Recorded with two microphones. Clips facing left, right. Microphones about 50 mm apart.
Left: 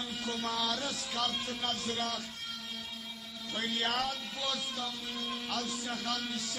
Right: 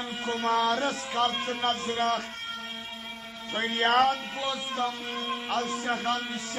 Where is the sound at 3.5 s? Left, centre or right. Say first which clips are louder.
Right 9 dB; right.